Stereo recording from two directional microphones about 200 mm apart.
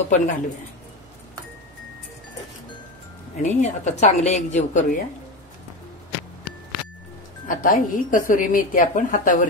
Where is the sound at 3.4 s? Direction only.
35° left (ahead or behind).